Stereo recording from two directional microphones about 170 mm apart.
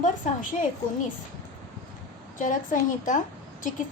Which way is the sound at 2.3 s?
50° left (ahead or behind).